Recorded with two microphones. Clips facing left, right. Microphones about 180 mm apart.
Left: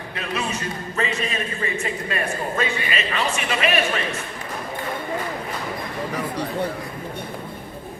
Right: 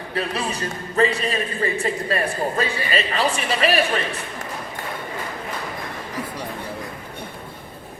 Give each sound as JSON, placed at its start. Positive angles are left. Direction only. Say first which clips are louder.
{"t": 0.1, "sound": "a man's voice", "louder": "right 2 dB", "side_deg": -35}